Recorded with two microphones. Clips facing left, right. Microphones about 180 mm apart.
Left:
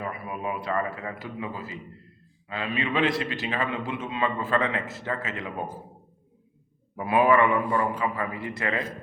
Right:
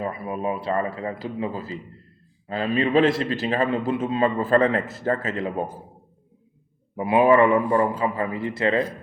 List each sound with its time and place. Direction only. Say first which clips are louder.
0.0 s a man's voice: right 5 dB; 30° right (ahead or behind)
6.9 s a man's voice: right 4 dB; 25° right (ahead or behind)